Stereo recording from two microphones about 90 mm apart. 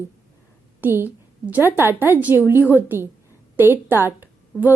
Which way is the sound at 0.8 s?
25° right (ahead or behind).